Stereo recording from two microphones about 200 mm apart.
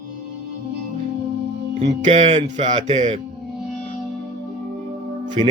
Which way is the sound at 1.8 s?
35° right (ahead or behind).